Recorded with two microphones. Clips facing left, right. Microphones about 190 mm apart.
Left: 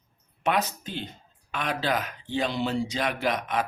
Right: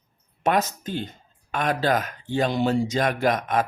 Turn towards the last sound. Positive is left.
turn(degrees=-45)  # may be behind; listen again after turning